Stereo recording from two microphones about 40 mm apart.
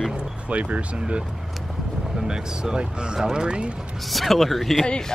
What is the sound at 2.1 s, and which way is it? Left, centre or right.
Speech, centre.